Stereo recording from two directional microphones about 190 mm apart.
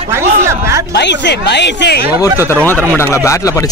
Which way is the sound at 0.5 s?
15° right (ahead or behind).